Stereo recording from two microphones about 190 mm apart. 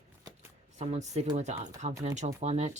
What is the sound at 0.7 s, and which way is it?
Speech, 35° right (ahead or behind).